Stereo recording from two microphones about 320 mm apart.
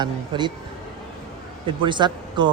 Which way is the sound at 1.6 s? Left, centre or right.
Centre.